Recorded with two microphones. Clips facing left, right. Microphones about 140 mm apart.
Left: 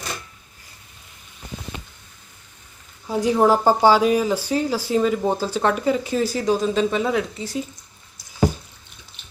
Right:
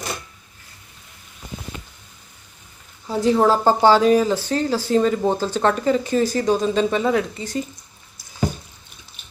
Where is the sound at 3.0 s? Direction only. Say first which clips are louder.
Even; 10° left (ahead or behind).